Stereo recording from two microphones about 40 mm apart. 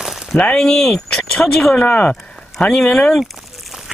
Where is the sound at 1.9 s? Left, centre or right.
Left.